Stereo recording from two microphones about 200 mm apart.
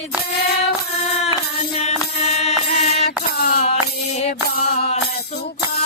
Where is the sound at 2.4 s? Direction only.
35° left (ahead or behind).